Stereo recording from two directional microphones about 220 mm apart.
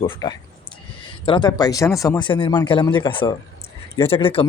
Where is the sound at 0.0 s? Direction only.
20° left (ahead or behind).